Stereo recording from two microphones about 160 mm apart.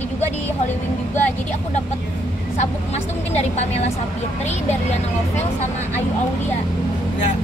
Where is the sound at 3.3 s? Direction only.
45° left (ahead or behind).